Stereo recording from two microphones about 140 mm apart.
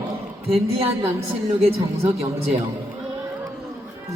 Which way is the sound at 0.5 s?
45° right (ahead or behind).